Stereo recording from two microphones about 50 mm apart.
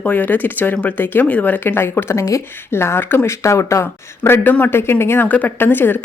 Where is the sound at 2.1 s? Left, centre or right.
Left.